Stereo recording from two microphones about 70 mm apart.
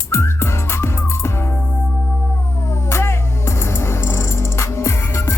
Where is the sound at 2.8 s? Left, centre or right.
Left.